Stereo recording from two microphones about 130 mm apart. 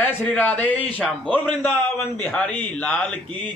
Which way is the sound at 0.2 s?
10° left (ahead or behind).